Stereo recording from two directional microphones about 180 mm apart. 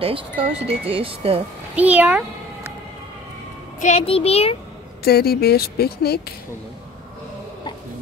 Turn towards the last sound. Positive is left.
turn(degrees=60)  # may be behind; listen again after turning